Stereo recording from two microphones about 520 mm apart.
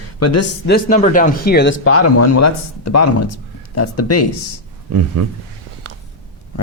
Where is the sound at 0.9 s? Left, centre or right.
Centre.